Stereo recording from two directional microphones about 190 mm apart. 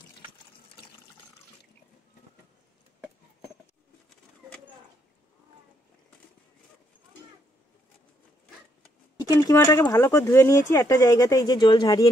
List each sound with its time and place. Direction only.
9.4 s speech: 15° left (ahead or behind)